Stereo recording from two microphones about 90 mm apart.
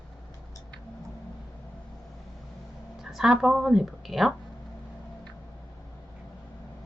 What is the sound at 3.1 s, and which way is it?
A woman's voice, 5° right (ahead or behind).